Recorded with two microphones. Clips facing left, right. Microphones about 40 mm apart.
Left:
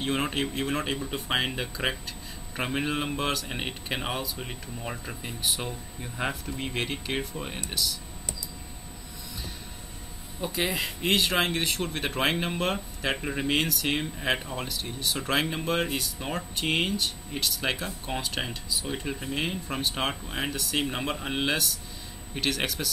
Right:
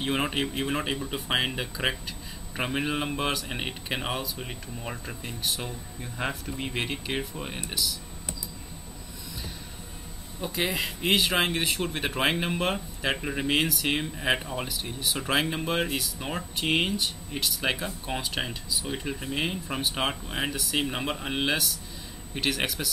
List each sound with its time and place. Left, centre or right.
0.0 s speech: centre
10.4 s speech: centre